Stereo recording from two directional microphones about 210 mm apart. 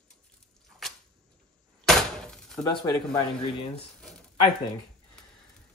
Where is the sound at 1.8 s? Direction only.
Centre (ahead or behind).